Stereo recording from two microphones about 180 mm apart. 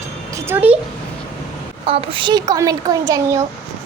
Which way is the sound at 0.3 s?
15° right (ahead or behind).